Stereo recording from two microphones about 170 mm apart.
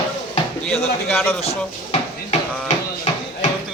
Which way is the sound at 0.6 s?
5° left (ahead or behind).